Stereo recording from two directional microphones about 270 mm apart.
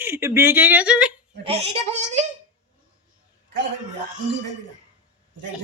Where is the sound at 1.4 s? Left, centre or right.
Right.